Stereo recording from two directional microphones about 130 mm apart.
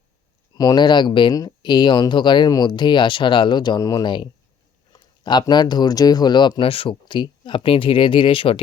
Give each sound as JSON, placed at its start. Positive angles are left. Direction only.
{"t": 0.5, "sound": "speech", "side_deg": 30}